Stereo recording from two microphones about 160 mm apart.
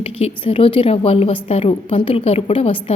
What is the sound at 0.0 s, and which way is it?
Speech, 35° left (ahead or behind).